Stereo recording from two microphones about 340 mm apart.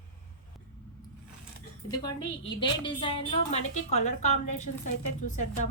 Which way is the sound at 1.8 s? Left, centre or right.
Centre.